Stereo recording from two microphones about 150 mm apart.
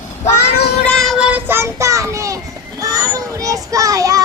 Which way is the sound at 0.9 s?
5° left (ahead or behind).